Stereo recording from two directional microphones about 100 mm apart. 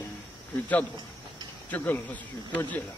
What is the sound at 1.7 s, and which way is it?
Speech, 20° left (ahead or behind).